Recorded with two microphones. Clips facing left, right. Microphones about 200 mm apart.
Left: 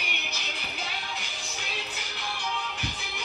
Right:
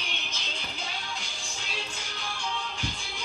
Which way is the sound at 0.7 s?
15° right (ahead or behind).